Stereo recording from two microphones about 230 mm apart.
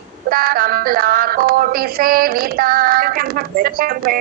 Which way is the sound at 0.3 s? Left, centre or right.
Right.